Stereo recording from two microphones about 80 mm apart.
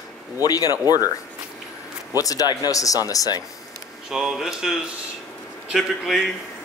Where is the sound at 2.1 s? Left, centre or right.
Left.